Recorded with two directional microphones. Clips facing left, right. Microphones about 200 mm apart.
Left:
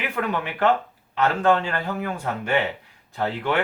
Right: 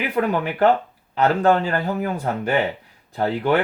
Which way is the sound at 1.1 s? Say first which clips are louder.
Right 3 dB; 40° right (ahead or behind).